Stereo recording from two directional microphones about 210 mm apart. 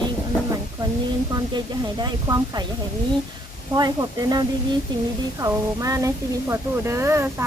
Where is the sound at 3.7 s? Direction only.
20° right (ahead or behind).